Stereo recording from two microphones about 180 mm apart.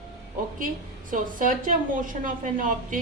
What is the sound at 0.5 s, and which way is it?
Speech, 50° right (ahead or behind).